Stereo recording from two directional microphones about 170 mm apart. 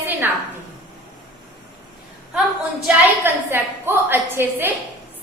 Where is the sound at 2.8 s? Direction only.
10° right (ahead or behind).